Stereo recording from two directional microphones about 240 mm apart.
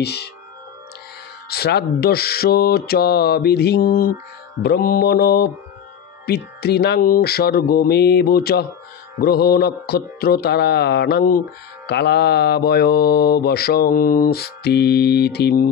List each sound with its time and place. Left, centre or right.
0.0 s speech: left
1.5 s mantra: left